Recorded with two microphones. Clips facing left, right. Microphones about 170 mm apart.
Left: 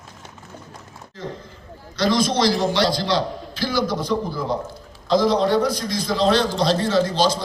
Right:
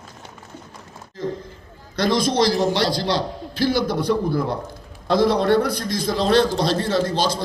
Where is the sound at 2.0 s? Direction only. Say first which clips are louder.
Right 1 dB; 55° right (ahead or behind).